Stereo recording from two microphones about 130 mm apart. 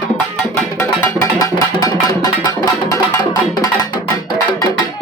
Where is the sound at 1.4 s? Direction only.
30° left (ahead or behind).